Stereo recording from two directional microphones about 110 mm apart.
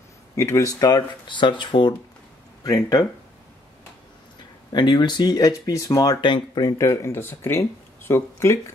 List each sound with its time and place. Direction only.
0.4 s speech: 25° left (ahead or behind); by 2.0 s 45° left (ahead or behind)
2.6 s speech: 35° left (ahead or behind)
4.7 s speech: 45° left (ahead or behind)
6.8 s speech: 25° left (ahead or behind)